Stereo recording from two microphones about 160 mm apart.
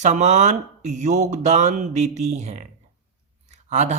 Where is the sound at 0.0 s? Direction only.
45° right (ahead or behind).